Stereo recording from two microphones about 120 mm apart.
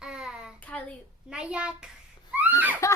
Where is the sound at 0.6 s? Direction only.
10° left (ahead or behind).